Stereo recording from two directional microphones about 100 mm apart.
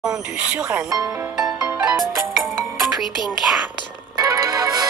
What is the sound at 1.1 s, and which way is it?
Speech, 10° right (ahead or behind).